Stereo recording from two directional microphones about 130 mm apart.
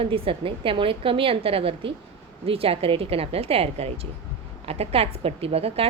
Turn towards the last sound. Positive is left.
turn(degrees=-50)  # may be behind; listen again after turning